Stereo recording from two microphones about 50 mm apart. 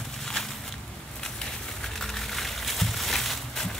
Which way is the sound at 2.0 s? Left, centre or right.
Centre.